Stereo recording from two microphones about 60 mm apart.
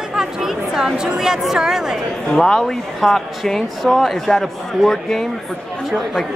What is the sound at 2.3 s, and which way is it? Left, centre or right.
Speech, centre.